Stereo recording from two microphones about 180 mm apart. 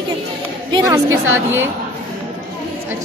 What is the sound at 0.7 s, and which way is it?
Speech, 20° right (ahead or behind).